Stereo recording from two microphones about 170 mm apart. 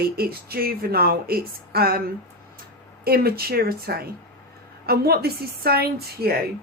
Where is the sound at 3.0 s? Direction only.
65° right (ahead or behind).